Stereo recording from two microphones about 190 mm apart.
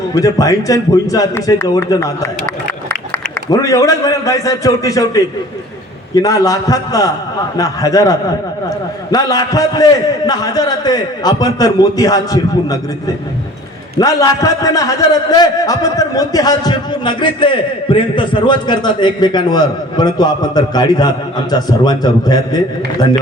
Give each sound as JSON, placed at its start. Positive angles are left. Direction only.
{"t": 0.1, "sound": "a man's voice", "side_deg": 20}
{"t": 3.5, "sound": "a man's voice", "side_deg": 15}
{"t": 6.2, "sound": "a man's voice", "side_deg": 20}